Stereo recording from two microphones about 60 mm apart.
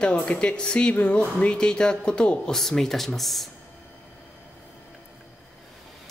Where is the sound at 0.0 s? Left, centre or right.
Centre.